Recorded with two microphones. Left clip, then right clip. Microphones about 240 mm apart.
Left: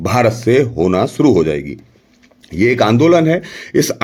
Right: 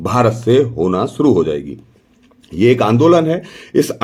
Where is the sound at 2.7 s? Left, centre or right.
Left.